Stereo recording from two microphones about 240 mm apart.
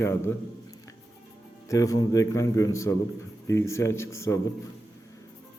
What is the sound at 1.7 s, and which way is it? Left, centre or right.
Speech, centre.